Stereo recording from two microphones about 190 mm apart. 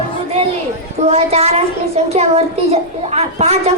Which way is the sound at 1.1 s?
35° right (ahead or behind).